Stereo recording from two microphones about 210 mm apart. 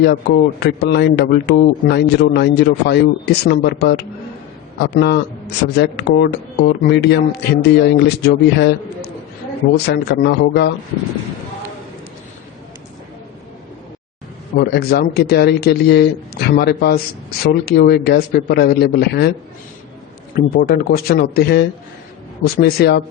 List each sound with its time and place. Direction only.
0.6 s a man's voice: 50° left (ahead or behind)
9.7 s a man's voice: 50° left (ahead or behind)
14.5 s a man's voice: 45° left (ahead or behind)
20.3 s a man's voice: 45° left (ahead or behind)